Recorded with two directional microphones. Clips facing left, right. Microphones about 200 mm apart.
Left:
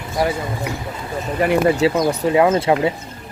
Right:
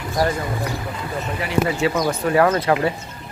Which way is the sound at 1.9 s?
20° left (ahead or behind).